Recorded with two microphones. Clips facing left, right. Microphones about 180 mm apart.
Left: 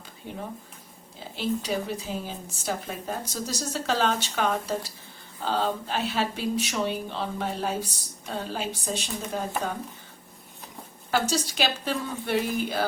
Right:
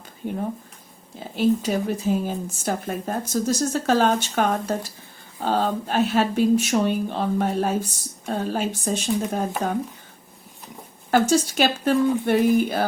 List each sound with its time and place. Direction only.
0.2 s speech: 50° right (ahead or behind)
11.1 s speech: 50° right (ahead or behind)